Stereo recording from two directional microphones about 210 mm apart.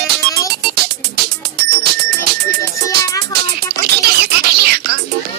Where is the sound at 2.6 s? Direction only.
15° left (ahead or behind).